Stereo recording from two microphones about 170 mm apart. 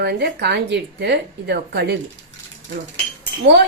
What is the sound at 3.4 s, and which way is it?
Speech, 80° right.